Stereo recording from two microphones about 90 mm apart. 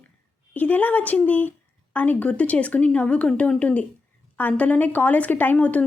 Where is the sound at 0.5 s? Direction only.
20° left (ahead or behind).